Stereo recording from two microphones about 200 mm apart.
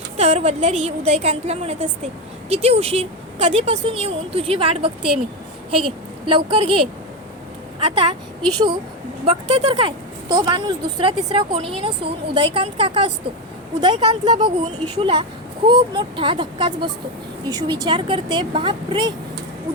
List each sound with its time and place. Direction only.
0.2 s a woman's voice: 30° right (ahead or behind)
7.9 s a woman's voice: 25° right (ahead or behind)